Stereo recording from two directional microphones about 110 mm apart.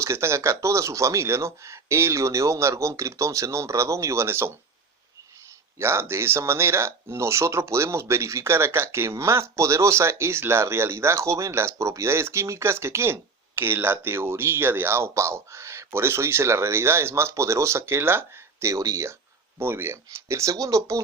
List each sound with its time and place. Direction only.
0.0 s speech: 25° right (ahead or behind)
5.8 s speech: 25° right (ahead or behind)